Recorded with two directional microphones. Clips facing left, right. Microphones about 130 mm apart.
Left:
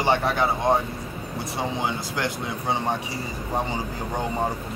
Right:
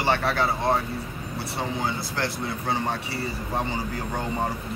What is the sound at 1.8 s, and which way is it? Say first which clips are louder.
Speech: left 1 dB; 15° left (ahead or behind).